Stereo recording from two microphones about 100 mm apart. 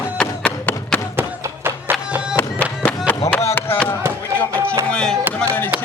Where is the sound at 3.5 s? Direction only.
20° left (ahead or behind).